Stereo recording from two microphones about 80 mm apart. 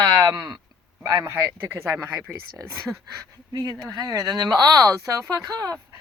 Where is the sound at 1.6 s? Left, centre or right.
Right.